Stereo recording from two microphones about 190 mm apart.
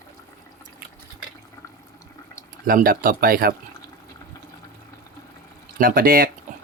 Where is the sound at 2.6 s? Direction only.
50° right (ahead or behind).